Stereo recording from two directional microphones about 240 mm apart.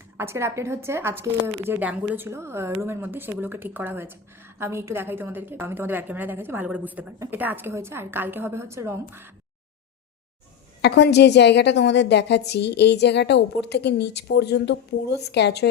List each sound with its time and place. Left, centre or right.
0.2 s a woman's voice: centre
10.8 s a woman's voice: left